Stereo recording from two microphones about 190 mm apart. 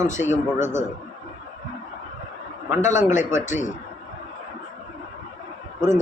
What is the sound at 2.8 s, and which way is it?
Speech, 40° left (ahead or behind).